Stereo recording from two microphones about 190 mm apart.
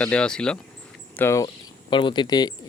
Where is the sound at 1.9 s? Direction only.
25° left (ahead or behind).